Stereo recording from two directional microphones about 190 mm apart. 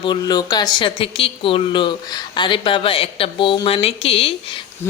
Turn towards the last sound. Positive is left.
turn(degrees=30)  # may be behind; listen again after turning